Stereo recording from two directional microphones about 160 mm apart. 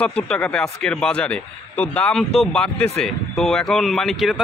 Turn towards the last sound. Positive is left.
turn(degrees=0)  # may be behind; listen again after turning